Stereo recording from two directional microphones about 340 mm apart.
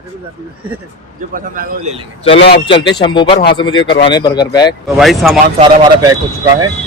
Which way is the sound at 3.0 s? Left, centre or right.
Centre.